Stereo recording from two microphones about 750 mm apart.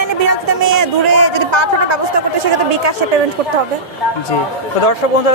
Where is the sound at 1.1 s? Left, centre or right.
Right.